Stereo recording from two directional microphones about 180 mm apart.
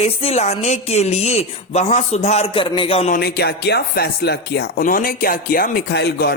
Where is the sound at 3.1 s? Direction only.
60° left (ahead or behind).